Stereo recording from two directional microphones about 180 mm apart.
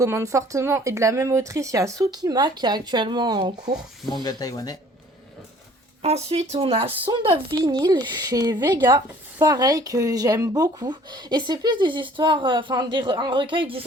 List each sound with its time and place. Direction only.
0.0 s speech: 15° right (ahead or behind)
3.8 s speech: centre (ahead or behind)
4.2 s speech: 20° left (ahead or behind)
6.0 s speech: 35° right (ahead or behind)